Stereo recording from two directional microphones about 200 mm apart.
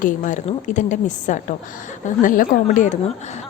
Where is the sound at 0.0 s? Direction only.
40° left (ahead or behind).